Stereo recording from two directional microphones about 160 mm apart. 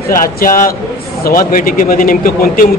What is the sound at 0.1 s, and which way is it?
Speech, 60° left (ahead or behind).